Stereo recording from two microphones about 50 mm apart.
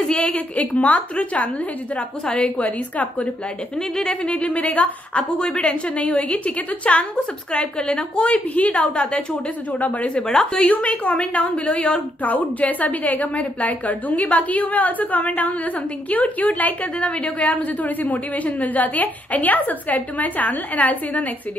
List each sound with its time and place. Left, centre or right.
0.1 s a woman's voice: left
3.9 s a woman's voice: centre
5.4 s a woman's voice: centre
9.7 s a woman's voice: left